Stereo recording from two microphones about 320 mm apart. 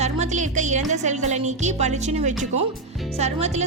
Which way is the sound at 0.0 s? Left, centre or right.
Right.